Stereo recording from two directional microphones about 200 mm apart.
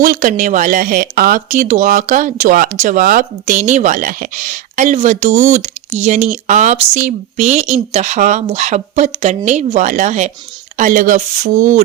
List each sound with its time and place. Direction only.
0.0 s speech: 40° right (ahead or behind)